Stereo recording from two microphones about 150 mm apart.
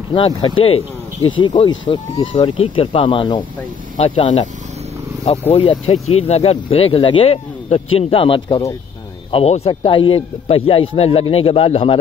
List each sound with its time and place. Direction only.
0.1 s speech: 35° left (ahead or behind)
5.5 s speech: 40° left (ahead or behind)